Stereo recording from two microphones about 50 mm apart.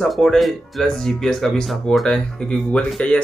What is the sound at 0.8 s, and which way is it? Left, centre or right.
Speech, centre.